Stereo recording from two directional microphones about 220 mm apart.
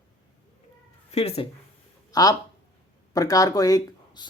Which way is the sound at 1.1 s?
30° left (ahead or behind).